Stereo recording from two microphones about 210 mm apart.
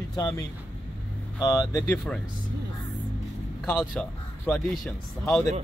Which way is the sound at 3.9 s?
5° left (ahead or behind).